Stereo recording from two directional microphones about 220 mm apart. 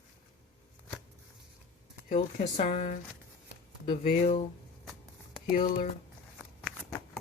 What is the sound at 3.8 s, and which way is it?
Speech, 25° left (ahead or behind).